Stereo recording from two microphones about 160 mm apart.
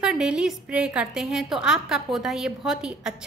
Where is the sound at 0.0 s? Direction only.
5° right (ahead or behind).